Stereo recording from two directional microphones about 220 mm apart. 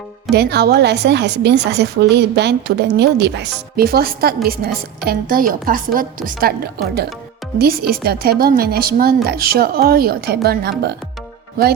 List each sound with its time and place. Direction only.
0.3 s a woman's voice: 50° right (ahead or behind)